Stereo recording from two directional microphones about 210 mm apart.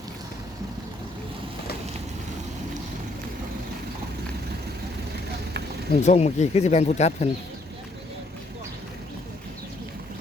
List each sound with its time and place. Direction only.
5.9 s speech: 35° left (ahead or behind)